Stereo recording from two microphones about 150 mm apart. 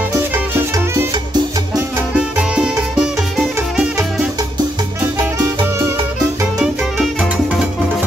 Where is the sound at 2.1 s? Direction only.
5° right (ahead or behind).